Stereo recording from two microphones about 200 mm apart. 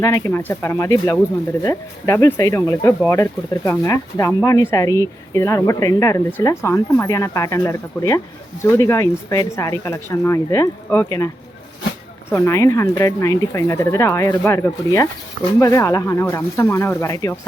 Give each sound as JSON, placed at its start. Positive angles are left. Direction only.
{"t": 0.0, "sound": "speech", "side_deg": 15}
{"t": 12.3, "sound": "speech", "side_deg": 15}